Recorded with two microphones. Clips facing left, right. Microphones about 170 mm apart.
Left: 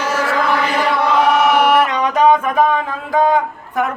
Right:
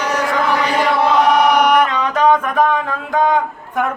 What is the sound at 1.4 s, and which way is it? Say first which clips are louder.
Chant: even; 5° left (ahead or behind).